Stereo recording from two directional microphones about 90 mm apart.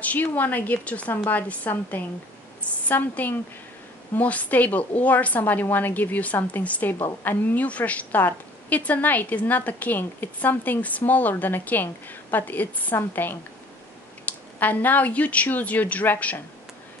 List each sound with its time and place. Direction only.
0.0 s a woman's voice: 20° left (ahead or behind)